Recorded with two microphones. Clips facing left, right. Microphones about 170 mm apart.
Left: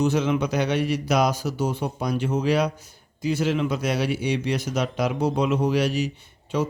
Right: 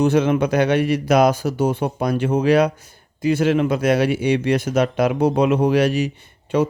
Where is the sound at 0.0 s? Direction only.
55° right (ahead or behind).